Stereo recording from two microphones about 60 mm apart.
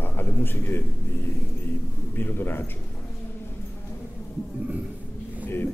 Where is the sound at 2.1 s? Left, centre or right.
Left.